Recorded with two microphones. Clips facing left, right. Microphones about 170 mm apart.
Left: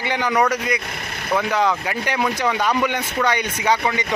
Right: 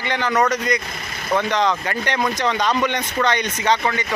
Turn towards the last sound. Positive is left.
turn(degrees=10)  # may be behind; listen again after turning